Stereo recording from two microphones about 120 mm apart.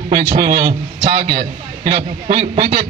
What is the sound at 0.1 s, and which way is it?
A man's voice, 50° right (ahead or behind).